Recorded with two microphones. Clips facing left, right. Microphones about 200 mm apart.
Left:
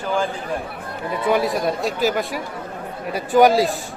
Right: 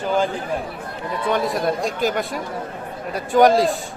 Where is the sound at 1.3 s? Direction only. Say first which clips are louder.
Left 1 dB; 5° left (ahead or behind).